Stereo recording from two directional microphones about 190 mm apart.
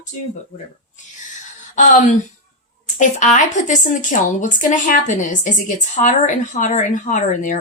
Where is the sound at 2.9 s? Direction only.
40° left (ahead or behind).